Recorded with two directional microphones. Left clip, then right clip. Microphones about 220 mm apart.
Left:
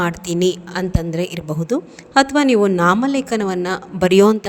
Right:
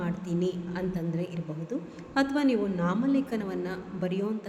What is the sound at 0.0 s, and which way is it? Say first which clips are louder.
A woman's voice: left 13 dB; 50° left (ahead or behind).